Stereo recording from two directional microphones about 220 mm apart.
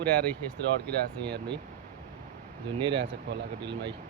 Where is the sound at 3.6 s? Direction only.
50° right (ahead or behind).